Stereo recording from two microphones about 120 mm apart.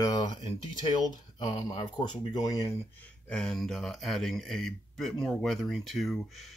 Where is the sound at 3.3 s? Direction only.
5° left (ahead or behind).